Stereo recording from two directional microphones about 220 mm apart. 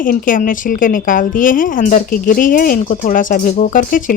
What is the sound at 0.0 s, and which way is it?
A woman's voice, 40° left (ahead or behind).